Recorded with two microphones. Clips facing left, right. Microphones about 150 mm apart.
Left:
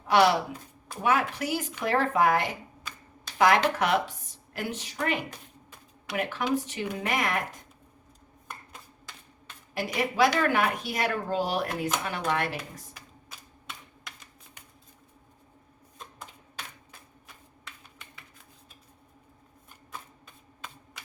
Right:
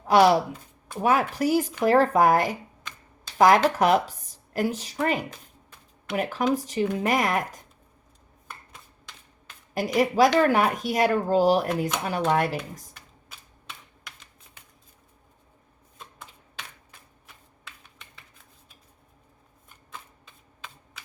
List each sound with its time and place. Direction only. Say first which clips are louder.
0.1 s speech: right 4 dB; 40° right (ahead or behind)
9.7 s speech: right 5 dB; 40° right (ahead or behind)